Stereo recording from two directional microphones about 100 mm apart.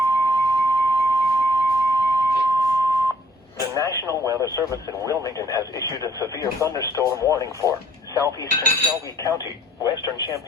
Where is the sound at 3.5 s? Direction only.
35° left (ahead or behind).